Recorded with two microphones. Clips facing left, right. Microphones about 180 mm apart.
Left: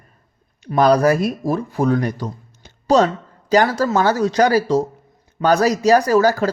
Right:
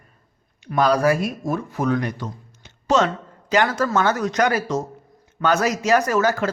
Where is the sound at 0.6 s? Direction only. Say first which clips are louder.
Left 4 dB; 40° left (ahead or behind).